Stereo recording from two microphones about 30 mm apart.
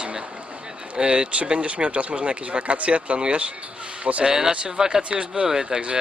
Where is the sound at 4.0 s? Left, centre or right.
Right.